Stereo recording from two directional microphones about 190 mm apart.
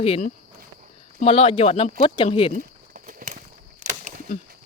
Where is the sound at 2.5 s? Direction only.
45° right (ahead or behind).